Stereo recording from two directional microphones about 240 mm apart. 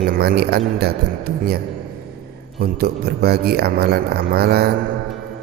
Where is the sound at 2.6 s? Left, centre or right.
Right.